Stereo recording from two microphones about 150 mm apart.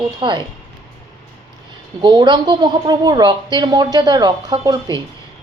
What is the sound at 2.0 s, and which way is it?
Speech, 30° right (ahead or behind).